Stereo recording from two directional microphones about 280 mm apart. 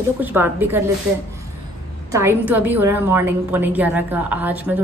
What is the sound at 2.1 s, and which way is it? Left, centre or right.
A woman's voice, centre.